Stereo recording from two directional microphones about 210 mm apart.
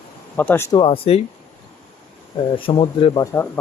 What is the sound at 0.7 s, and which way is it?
Speech, 25° left (ahead or behind).